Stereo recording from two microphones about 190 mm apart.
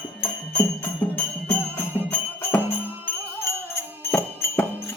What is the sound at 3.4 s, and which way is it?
Music, 15° left (ahead or behind).